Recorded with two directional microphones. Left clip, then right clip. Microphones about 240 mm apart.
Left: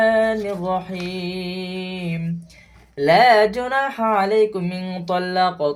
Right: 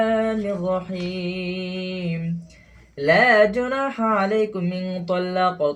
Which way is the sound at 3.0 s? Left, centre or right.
Left.